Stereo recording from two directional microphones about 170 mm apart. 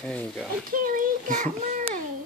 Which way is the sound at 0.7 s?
50° right (ahead or behind).